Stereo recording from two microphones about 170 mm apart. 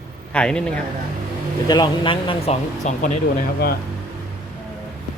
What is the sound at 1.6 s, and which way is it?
Speech, 25° left (ahead or behind).